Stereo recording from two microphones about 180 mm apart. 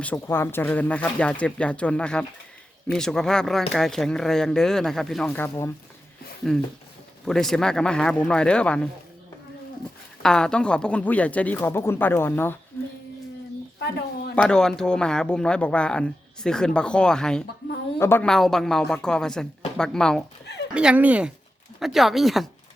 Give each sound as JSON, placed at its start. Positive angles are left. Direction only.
{"t": 0.0, "sound": "speech", "side_deg": 10}
{"t": 10.2, "sound": "speech", "side_deg": 5}
{"t": 13.7, "sound": "a sound", "side_deg": 65}
{"t": 14.3, "sound": "speech", "side_deg": 5}
{"t": 20.7, "sound": "speech", "side_deg": -5}